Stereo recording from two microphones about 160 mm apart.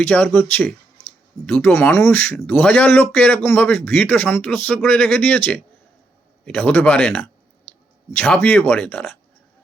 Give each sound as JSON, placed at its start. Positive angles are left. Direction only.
{"t": 0.0, "sound": "speech", "side_deg": 10}